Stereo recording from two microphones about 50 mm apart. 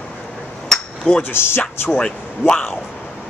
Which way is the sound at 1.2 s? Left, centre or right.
Left.